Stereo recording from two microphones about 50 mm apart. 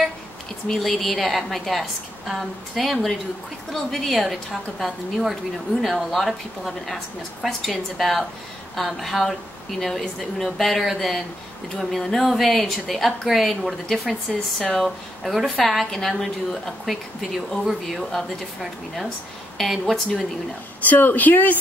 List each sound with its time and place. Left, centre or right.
0.7 s a woman's voice: centre
14.6 s speech: centre
15.2 s a woman's voice: centre
20.8 s speech: left